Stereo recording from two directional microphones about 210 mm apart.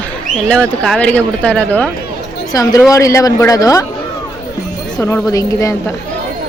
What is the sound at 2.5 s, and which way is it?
Speech, 15° left (ahead or behind).